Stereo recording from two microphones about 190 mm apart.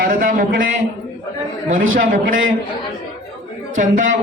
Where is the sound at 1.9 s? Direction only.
45° right (ahead or behind).